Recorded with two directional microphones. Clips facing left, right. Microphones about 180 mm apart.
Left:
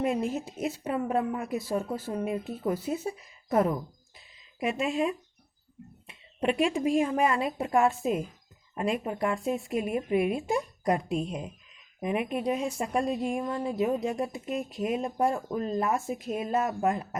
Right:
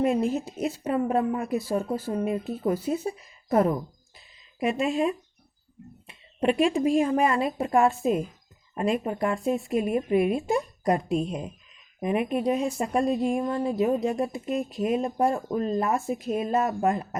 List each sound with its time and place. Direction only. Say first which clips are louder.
0.0 s speech: right 4 dB; 35° right (ahead or behind)